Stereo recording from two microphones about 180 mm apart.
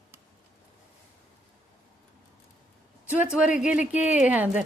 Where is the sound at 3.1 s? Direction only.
5° right (ahead or behind).